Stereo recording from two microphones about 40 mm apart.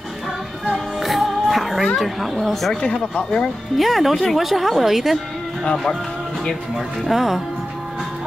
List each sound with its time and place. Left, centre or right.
0.7 s music: centre
2.4 s speech: centre
2.8 s speech: left
3.7 s speech: centre
7.1 s speech: centre